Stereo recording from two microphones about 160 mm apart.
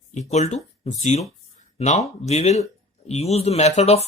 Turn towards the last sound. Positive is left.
turn(degrees=40)  # may be behind; listen again after turning